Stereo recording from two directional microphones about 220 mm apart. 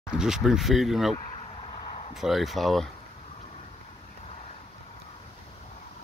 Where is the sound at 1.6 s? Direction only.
25° left (ahead or behind).